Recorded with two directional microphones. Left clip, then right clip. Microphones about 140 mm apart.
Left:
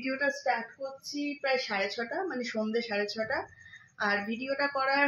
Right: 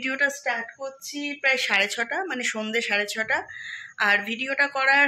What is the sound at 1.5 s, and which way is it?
Speech, 30° right (ahead or behind).